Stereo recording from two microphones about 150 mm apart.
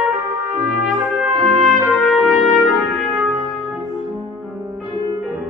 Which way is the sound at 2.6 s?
Centre (ahead or behind).